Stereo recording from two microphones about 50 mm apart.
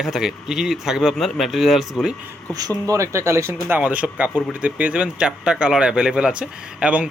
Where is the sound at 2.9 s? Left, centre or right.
Right.